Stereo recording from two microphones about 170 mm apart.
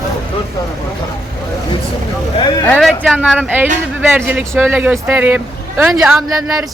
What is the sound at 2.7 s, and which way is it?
Speech, 5° left (ahead or behind).